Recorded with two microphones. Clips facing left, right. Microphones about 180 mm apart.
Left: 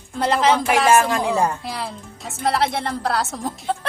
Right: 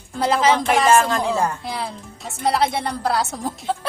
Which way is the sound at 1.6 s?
Centre (ahead or behind).